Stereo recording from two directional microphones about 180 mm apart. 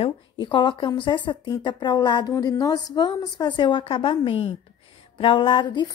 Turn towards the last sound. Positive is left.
turn(degrees=25)  # may be behind; listen again after turning